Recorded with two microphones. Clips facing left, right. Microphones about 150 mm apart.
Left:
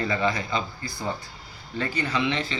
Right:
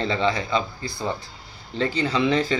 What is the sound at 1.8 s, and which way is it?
Speech, 30° right (ahead or behind).